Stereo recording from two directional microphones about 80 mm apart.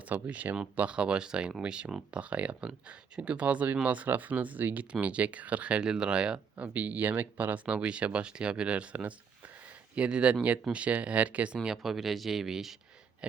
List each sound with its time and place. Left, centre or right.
0.1 s speech: right; by 12.7 s centre